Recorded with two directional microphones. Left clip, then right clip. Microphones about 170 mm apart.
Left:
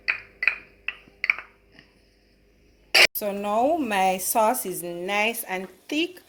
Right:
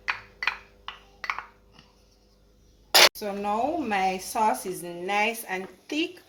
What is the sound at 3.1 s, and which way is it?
A woman's voice, 60° left (ahead or behind).